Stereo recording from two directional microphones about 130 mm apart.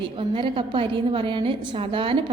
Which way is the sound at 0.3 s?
40° right (ahead or behind).